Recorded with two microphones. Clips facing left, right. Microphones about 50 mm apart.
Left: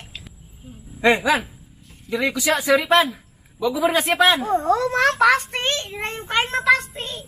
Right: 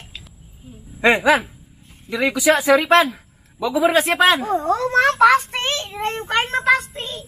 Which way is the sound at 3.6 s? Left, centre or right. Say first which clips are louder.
Right 3 dB; right.